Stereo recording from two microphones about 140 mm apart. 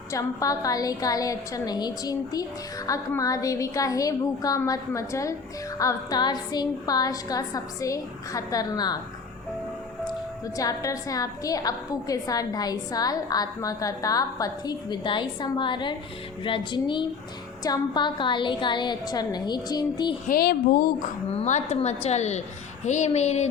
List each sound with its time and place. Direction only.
0.1 s a woman's voice: 25° left (ahead or behind)
10.6 s a woman's voice: 25° left (ahead or behind)
20.2 s speech: 90° left
21.3 s a woman's voice: 55° left (ahead or behind)